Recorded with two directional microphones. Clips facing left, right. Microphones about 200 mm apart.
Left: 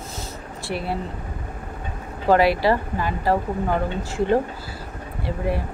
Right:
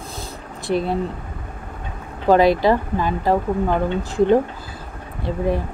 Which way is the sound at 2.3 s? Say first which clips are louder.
Right 3 dB; 20° right (ahead or behind).